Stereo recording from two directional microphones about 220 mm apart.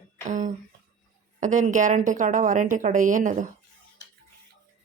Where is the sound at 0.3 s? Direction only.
35° right (ahead or behind).